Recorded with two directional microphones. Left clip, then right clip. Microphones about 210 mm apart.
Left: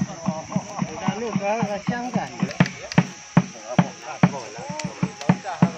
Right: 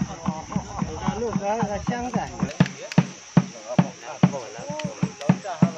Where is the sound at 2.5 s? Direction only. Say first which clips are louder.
Left 3 dB; 25° left (ahead or behind).